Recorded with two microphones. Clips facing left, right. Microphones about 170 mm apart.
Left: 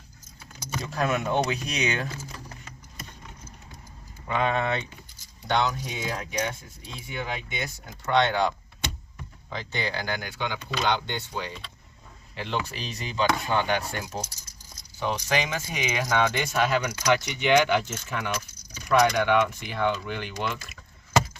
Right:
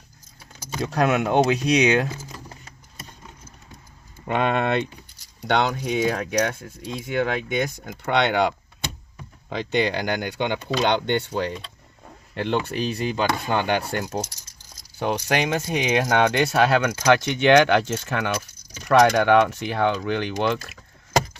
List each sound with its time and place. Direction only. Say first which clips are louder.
0.9 s speech: right 6 dB; 75° right (ahead or behind)
4.3 s speech: right 4 dB; 65° right (ahead or behind)
6.8 s speech: right 10 dB; 65° right (ahead or behind)
12.0 s wild animals: right 9 dB; 60° right (ahead or behind)
12.6 s speech: right 11 dB; 55° right (ahead or behind); by 18.3 s 85° right
18.9 s speech: right 5 dB; 70° right (ahead or behind)